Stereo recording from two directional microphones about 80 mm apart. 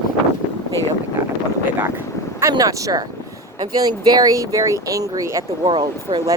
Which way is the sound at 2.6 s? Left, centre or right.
Right.